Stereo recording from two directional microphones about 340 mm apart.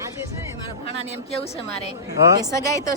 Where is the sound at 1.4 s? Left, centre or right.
Centre.